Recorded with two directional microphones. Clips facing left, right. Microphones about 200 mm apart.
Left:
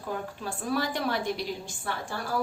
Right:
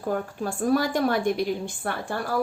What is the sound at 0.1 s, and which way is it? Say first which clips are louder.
A woman's voice: right 6 dB; 45° right (ahead or behind).